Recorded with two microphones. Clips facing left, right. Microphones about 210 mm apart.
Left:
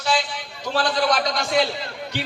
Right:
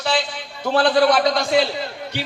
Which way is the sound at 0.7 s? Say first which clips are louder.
Right 6 dB; 60° right (ahead or behind).